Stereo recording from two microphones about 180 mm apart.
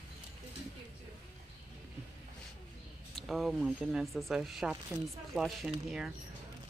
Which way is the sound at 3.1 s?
Centre (ahead or behind).